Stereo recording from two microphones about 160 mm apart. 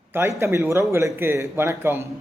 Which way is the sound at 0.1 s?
15° right (ahead or behind).